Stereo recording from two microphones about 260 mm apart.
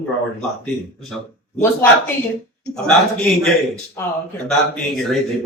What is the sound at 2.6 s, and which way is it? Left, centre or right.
Speech, centre.